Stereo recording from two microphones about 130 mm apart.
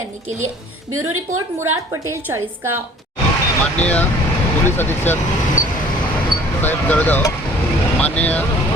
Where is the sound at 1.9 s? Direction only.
20° right (ahead or behind).